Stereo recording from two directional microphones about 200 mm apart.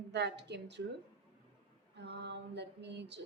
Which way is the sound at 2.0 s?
60° right (ahead or behind).